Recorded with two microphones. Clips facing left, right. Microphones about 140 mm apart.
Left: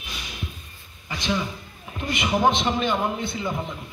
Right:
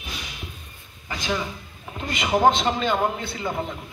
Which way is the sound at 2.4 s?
40° right (ahead or behind).